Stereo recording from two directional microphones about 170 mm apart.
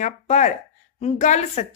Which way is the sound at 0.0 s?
45° left (ahead or behind).